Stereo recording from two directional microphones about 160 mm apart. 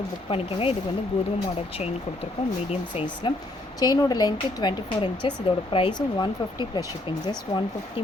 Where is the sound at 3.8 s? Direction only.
25° left (ahead or behind).